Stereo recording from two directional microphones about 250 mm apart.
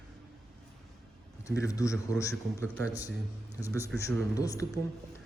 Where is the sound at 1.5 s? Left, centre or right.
Centre.